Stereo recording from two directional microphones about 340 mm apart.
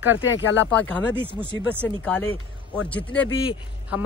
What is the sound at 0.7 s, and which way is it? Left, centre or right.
Speech, centre.